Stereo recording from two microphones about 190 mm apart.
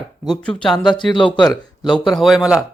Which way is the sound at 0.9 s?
25° left (ahead or behind).